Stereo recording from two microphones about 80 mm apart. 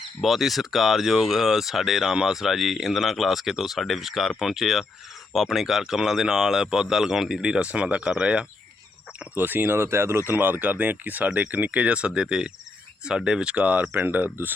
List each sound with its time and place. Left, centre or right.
0.2 s speech: centre
9.3 s speech: right